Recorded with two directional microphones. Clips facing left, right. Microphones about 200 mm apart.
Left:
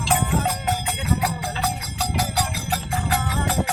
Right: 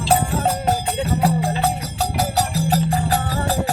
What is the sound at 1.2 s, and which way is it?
Music, 30° right (ahead or behind).